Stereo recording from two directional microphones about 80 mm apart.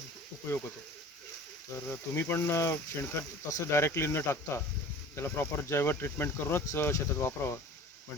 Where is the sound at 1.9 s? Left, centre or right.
Left.